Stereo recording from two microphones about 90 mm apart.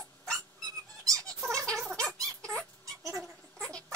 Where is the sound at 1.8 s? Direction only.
5° left (ahead or behind).